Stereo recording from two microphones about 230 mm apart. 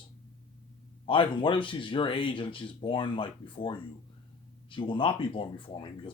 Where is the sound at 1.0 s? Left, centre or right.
Left.